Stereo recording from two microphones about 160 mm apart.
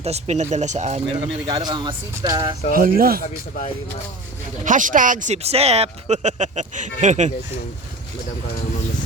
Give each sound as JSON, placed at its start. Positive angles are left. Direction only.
{"t": 0.0, "sound": "speech", "side_deg": -40}
{"t": 1.2, "sound": "speech", "side_deg": -25}
{"t": 2.7, "sound": "speech", "side_deg": -65}
{"t": 4.6, "sound": "speech", "side_deg": -55}